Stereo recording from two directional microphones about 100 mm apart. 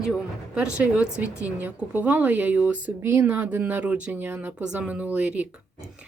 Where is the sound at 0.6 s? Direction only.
10° right (ahead or behind).